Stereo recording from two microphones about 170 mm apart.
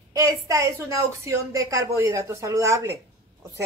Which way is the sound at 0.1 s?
20° right (ahead or behind).